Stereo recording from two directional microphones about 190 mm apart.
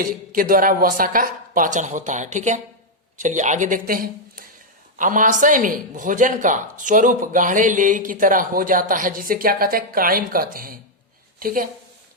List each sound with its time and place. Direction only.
0.0 s a woman's voice: 50° right (ahead or behind)